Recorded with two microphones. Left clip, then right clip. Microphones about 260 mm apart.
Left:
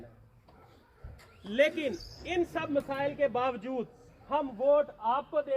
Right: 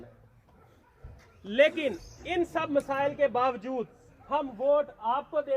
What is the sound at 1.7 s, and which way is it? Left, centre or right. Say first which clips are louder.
Cricket: right 3 dB; centre.